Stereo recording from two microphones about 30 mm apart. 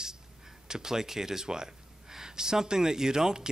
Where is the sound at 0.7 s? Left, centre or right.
Centre.